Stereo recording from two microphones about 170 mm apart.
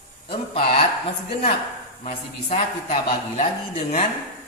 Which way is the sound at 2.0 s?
45° left (ahead or behind).